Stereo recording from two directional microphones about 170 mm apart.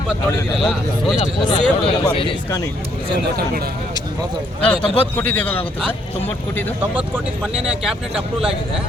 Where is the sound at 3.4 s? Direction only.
65° right (ahead or behind).